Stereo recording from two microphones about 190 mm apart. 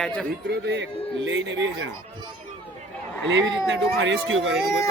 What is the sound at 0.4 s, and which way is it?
Speech, 60° right (ahead or behind).